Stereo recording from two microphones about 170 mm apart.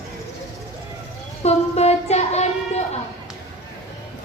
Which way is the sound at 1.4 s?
40° left (ahead or behind).